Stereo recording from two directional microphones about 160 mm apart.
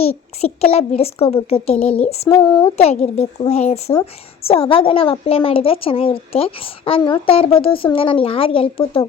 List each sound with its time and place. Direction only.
0.0 s a woman's voice: 40° left (ahead or behind)
2.3 s speech: 20° left (ahead or behind)
2.7 s a woman's voice: 40° left (ahead or behind)